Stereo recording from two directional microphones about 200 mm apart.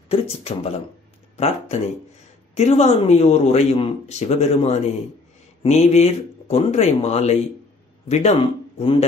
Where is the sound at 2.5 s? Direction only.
35° left (ahead or behind).